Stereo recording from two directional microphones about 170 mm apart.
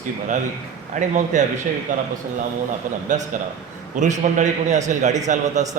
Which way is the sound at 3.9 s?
45° right (ahead or behind).